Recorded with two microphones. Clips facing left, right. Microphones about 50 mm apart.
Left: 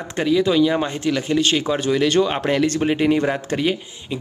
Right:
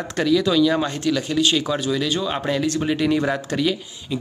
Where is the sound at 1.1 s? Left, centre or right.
Left.